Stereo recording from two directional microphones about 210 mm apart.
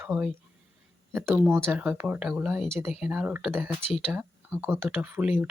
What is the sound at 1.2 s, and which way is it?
Speech, 10° right (ahead or behind).